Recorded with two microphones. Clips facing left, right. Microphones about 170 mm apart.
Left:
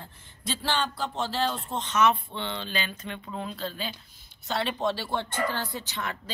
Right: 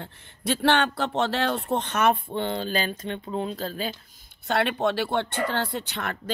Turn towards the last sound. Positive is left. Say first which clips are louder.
# right 2 dB
turn(degrees=-65)  # may be behind; listen again after turning